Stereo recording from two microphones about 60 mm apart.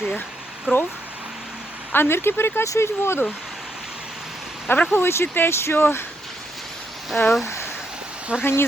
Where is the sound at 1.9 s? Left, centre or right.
Left.